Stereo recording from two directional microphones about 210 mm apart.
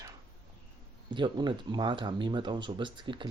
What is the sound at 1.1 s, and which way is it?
Speech, 20° right (ahead or behind).